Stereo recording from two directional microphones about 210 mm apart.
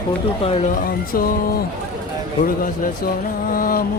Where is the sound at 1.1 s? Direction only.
45° left (ahead or behind).